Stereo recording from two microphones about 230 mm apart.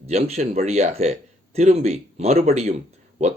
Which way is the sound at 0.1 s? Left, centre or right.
Right.